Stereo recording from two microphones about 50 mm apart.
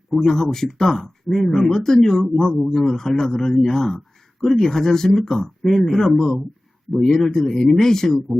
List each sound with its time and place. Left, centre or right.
0.1 s a man's voice: centre
2.2 s speech: centre
2.7 s a man's voice: centre